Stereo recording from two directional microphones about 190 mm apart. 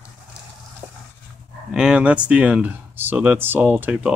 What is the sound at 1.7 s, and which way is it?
Speech, 5° right (ahead or behind).